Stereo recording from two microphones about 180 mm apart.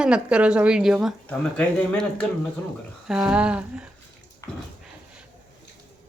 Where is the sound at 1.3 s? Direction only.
10° left (ahead or behind).